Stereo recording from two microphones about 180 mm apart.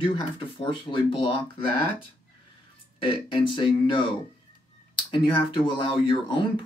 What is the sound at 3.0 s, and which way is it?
Speech, 30° left (ahead or behind).